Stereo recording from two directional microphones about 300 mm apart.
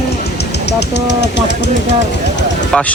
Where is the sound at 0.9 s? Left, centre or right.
Left.